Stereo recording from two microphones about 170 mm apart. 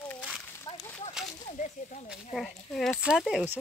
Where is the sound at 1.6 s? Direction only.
45° left (ahead or behind).